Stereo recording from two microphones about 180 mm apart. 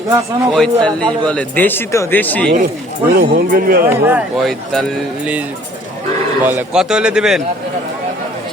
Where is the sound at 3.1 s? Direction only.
55° right (ahead or behind).